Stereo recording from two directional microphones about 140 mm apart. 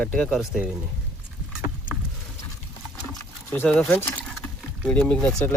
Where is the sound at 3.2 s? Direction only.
15° left (ahead or behind).